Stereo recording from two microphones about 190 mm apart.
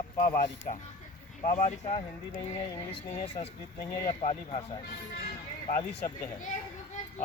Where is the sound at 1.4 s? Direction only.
40° left (ahead or behind).